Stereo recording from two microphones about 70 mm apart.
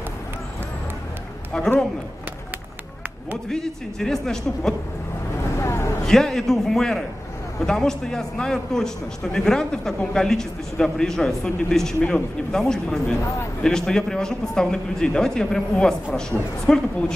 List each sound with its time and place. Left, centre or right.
1.5 s a man's voice: centre
3.4 s a man's voice: centre
5.6 s a sound: left
6.0 s a man's voice: centre